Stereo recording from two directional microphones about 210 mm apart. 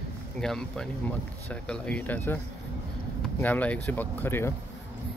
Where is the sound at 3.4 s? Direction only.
10° left (ahead or behind).